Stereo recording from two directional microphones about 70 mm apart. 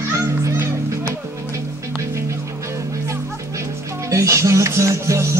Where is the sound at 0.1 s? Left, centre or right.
Right.